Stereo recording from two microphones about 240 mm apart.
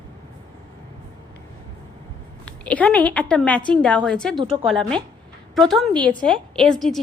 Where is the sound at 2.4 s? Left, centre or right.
Centre.